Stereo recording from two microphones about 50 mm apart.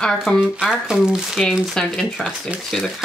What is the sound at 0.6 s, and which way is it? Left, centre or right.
Speech, centre.